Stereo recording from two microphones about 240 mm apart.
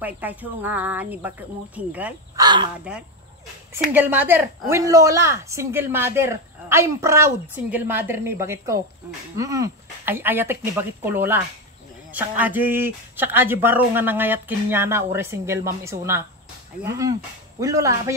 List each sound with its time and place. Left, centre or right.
0.0 s speech: centre
2.4 s speech: centre
3.7 s speech: centre